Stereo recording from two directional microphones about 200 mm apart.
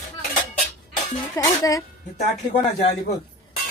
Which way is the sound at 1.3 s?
15° left (ahead or behind).